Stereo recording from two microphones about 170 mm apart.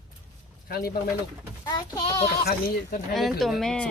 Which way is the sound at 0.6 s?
65° left (ahead or behind).